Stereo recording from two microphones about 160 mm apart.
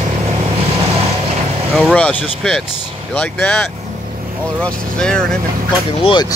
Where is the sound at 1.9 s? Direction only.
5° left (ahead or behind).